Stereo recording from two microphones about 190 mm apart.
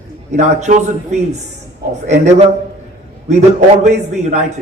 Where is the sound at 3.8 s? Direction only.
40° right (ahead or behind).